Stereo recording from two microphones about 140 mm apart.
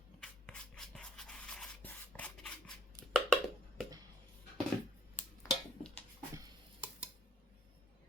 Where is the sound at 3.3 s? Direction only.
Centre (ahead or behind).